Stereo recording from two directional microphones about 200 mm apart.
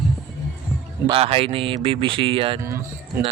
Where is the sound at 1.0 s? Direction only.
30° right (ahead or behind).